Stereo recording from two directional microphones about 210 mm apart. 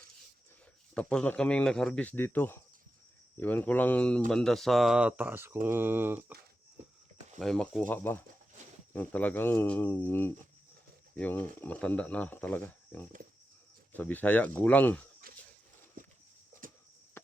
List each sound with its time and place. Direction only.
0.9 s speech: 5° left (ahead or behind)
7.3 s speech: centre (ahead or behind)
15.2 s a sound: 45° right (ahead or behind)
16.0 s horse: 40° right (ahead or behind)